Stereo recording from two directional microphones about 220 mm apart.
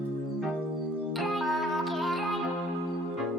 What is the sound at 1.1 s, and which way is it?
Music, centre (ahead or behind).